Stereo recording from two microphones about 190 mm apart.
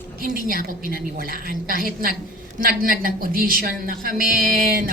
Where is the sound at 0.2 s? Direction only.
50° right (ahead or behind).